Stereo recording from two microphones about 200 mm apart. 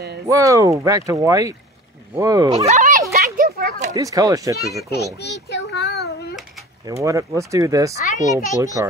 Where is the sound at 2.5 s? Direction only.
35° right (ahead or behind).